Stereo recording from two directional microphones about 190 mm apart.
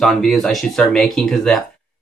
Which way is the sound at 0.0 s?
Centre (ahead or behind).